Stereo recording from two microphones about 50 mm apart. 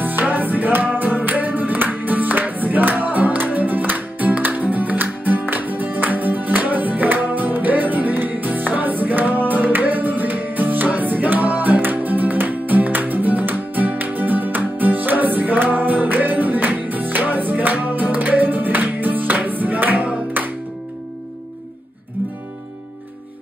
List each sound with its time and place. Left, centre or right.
0.0 s music: right